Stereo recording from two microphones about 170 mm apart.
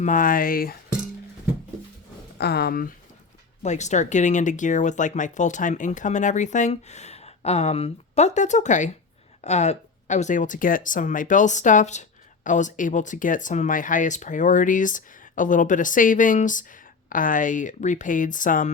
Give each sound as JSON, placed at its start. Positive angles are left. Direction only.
{"t": 0.0, "sound": "speech", "side_deg": 50}
{"t": 2.4, "sound": "speech", "side_deg": 70}
{"t": 3.6, "sound": "speech", "side_deg": 45}